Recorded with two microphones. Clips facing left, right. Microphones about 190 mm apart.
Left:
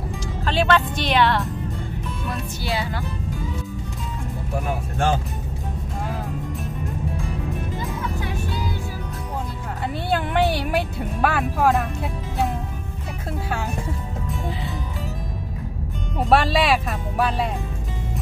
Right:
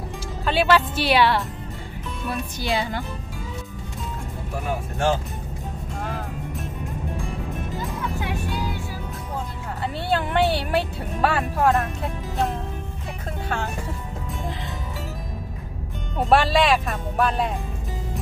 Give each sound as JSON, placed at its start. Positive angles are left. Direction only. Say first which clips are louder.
{"t": 0.5, "sound": "speech", "louder": "right 1 dB", "side_deg": -10}
{"t": 2.6, "sound": "speech", "louder": "right 2 dB", "side_deg": -20}
{"t": 10.1, "sound": "a sound", "louder": "even", "side_deg": 10}
{"t": 11.1, "sound": "speech", "louder": "even", "side_deg": 5}
{"t": 16.2, "sound": "speech", "louder": "even", "side_deg": 0}